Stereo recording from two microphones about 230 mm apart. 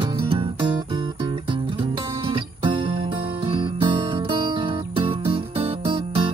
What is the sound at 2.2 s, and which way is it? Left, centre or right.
Music, right.